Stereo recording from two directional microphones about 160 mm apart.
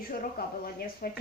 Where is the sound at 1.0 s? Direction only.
65° left (ahead or behind).